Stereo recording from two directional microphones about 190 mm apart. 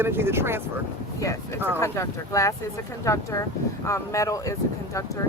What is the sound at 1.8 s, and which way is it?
Speech, 15° left (ahead or behind).